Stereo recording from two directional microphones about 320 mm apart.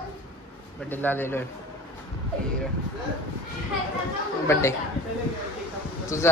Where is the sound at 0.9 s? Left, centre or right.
Centre.